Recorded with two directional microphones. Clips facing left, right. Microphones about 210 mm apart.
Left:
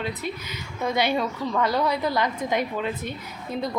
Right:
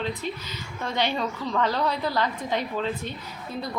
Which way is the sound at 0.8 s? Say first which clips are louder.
Left 3 dB; 10° left (ahead or behind).